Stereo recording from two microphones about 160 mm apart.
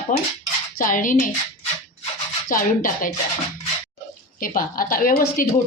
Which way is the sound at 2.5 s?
60° left (ahead or behind).